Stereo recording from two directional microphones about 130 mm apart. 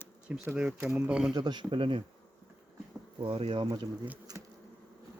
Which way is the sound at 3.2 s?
45° right (ahead or behind).